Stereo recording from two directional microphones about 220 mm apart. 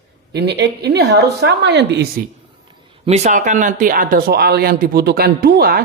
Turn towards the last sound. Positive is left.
turn(degrees=-45)  # may be behind; listen again after turning